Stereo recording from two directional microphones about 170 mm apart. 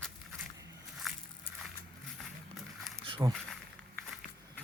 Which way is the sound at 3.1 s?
25° right (ahead or behind).